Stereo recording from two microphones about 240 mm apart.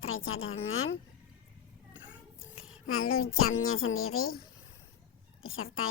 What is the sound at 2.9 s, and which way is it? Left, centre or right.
A woman's voice, left.